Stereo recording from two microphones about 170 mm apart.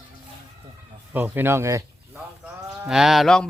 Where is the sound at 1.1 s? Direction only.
10° right (ahead or behind).